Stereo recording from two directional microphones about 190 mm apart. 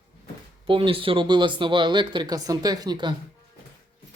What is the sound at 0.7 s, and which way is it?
Speech, 30° right (ahead or behind).